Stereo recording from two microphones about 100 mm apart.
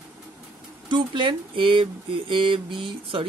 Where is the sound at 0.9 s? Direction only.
55° right (ahead or behind).